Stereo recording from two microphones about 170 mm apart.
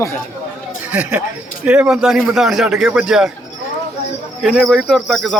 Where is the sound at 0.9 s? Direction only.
10° right (ahead or behind).